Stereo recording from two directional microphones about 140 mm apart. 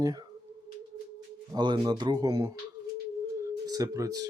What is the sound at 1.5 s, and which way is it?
Speech, 30° right (ahead or behind).